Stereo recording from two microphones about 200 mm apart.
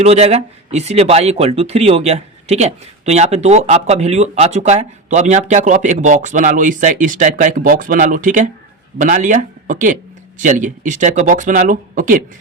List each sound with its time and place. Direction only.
0.0 s speech: 35° right (ahead or behind)